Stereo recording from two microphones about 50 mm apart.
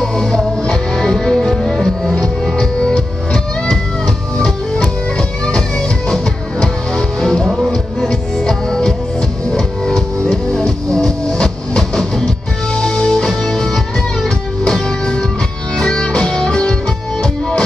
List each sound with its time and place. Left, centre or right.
0.0 s music: centre
6.6 s music: centre
7.4 s music: centre
8.1 s music: centre